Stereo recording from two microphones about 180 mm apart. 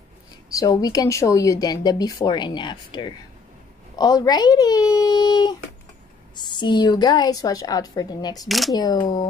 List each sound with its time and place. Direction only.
0.5 s speech: 20° left (ahead or behind)
8.5 s speech: centre (ahead or behind)
8.7 s speech: 25° left (ahead or behind)